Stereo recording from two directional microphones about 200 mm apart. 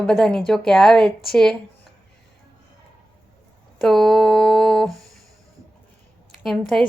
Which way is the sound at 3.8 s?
Centre (ahead or behind).